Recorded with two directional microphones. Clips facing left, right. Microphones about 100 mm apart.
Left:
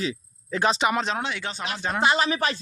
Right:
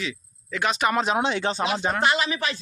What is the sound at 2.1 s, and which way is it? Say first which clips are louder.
Speech: left 2 dB; 35° left (ahead or behind).